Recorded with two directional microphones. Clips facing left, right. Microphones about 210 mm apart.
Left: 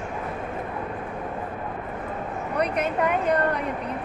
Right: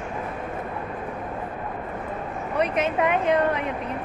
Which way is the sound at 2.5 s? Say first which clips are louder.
Right 2 dB; centre (ahead or behind).